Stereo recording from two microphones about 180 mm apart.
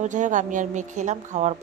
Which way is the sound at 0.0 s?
45° right (ahead or behind).